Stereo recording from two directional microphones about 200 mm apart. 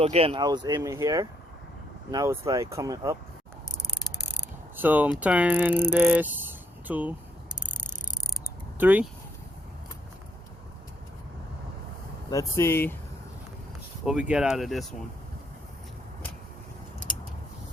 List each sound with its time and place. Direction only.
0.0 s speech: 30° right (ahead or behind)
4.8 s speech: 10° right (ahead or behind)
8.8 s speech: 10° right (ahead or behind)
12.3 s speech: 15° left (ahead or behind)
14.0 s speech: 5° right (ahead or behind)